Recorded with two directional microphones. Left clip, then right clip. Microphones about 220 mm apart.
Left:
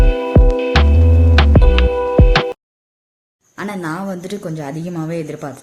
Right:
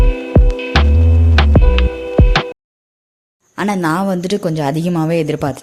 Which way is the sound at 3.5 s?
35° right (ahead or behind).